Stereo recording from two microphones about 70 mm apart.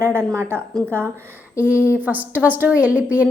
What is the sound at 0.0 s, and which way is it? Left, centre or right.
A woman's voice, right.